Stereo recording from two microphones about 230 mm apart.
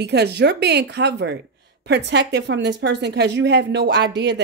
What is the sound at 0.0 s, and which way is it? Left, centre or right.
Speech, right.